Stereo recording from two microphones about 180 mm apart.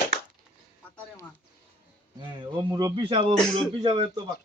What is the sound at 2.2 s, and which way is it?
Speech, 25° right (ahead or behind).